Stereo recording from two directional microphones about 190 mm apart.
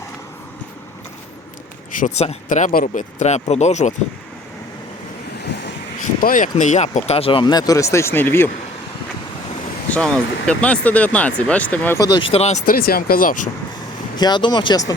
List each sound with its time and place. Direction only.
1.9 s speech: 45° left (ahead or behind)
6.1 s speech: 45° left (ahead or behind); by 8.4 s 10° left (ahead or behind)
9.9 s speech: 5° left (ahead or behind); by 13.5 s 45° left (ahead or behind)
14.2 s speech: 25° left (ahead or behind)